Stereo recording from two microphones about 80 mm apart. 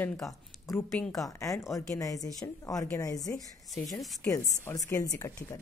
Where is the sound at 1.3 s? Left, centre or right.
Left.